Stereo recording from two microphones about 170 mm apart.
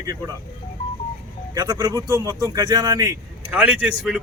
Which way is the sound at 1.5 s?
20° right (ahead or behind).